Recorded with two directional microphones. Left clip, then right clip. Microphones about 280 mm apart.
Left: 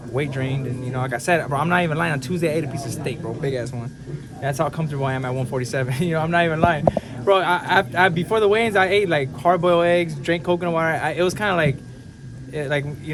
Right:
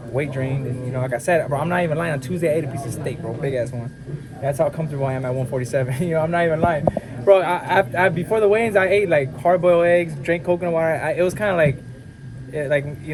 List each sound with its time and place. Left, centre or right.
0.1 s speech: centre